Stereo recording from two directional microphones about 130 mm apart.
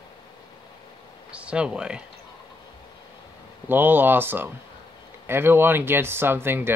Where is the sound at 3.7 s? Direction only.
15° right (ahead or behind).